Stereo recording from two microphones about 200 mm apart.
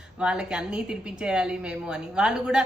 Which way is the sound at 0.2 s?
5° right (ahead or behind).